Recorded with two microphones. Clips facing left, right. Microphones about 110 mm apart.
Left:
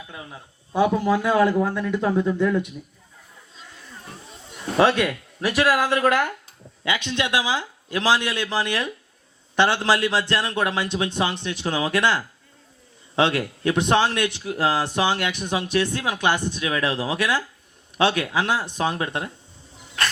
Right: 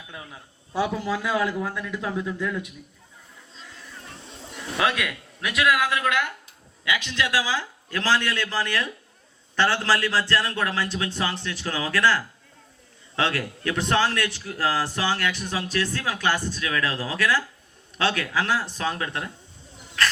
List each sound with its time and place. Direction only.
0.1 s a man's voice: 25° left (ahead or behind)
4.8 s speech: 30° left (ahead or behind)
6.8 s a man's voice: 25° left (ahead or behind)